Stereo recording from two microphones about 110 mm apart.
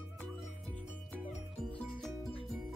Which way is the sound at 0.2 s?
15° left (ahead or behind).